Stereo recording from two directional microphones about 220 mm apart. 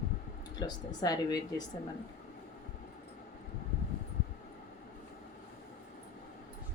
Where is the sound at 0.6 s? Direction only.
20° left (ahead or behind).